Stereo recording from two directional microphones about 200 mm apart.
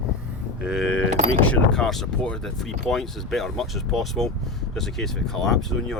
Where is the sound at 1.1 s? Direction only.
35° right (ahead or behind).